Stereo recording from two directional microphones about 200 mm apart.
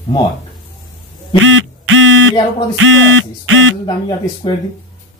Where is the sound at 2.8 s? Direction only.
80° right.